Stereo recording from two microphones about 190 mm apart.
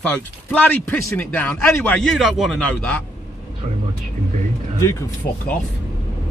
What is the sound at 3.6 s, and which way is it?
Speech, 30° right (ahead or behind).